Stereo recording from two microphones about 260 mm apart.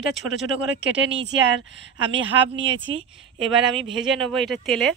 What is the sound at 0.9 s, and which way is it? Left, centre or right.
Speech, right.